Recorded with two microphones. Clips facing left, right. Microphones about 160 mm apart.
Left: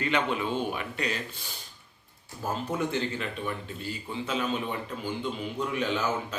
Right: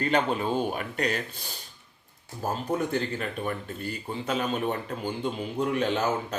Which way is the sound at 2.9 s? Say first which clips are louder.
Right 2 dB; 45° right (ahead or behind).